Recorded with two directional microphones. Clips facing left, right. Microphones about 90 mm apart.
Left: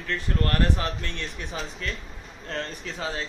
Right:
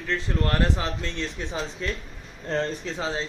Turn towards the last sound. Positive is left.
turn(degrees=-25)  # may be behind; listen again after turning